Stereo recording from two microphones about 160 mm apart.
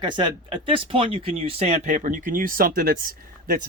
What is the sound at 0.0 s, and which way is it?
Speech, 30° right (ahead or behind).